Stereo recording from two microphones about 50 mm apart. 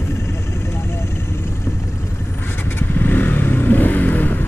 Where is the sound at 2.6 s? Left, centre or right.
Left.